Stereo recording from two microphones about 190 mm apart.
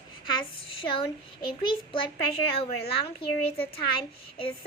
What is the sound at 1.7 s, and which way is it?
Speech, 25° left (ahead or behind).